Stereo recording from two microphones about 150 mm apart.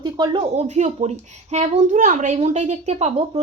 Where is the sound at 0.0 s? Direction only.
30° right (ahead or behind).